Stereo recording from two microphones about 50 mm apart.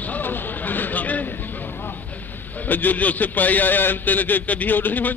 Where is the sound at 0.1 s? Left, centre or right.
Left.